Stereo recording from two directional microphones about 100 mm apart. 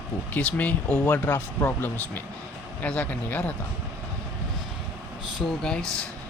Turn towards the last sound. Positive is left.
turn(degrees=5)  # may be behind; listen again after turning